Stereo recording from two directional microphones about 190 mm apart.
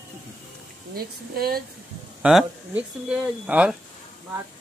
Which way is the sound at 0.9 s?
50° right (ahead or behind).